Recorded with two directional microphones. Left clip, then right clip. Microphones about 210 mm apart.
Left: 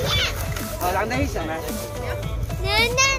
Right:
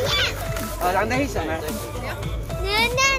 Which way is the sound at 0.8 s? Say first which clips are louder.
Right 2 dB; 5° right (ahead or behind).